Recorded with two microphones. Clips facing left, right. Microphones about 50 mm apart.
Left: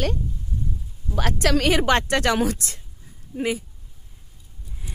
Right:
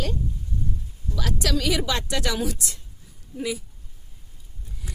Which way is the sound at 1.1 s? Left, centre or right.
Left.